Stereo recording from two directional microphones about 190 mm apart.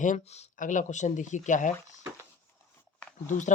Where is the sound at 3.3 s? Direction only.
40° left (ahead or behind).